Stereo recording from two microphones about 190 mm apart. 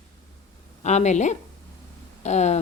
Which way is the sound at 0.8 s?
35° left (ahead or behind).